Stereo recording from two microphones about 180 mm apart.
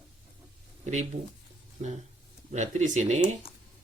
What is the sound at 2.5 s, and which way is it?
Speech, 40° right (ahead or behind).